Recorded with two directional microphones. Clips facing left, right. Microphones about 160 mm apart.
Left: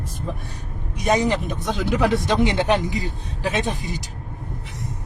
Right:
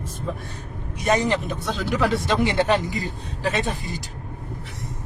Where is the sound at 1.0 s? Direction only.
15° left (ahead or behind).